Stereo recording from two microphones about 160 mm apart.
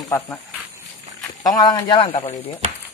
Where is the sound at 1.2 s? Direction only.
25° left (ahead or behind).